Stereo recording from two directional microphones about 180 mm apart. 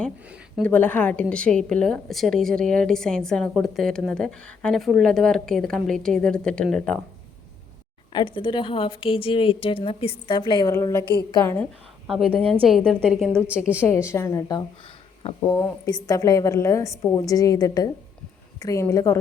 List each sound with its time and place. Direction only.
0.6 s a woman's voice: 10° left (ahead or behind)
8.1 s a woman's voice: 25° left (ahead or behind); by 13.1 s centre (ahead or behind)
13.8 s a woman's voice: 15° left (ahead or behind)